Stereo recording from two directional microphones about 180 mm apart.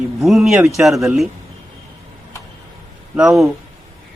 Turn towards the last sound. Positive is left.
turn(degrees=0)  # may be behind; listen again after turning